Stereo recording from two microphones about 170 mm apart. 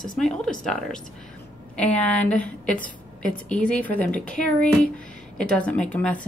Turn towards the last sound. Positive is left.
turn(degrees=5)  # may be behind; listen again after turning